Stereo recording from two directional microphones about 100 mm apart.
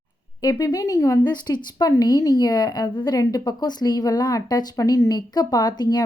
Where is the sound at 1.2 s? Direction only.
45° left (ahead or behind).